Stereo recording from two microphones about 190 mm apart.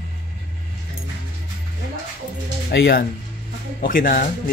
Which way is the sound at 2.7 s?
60° left (ahead or behind).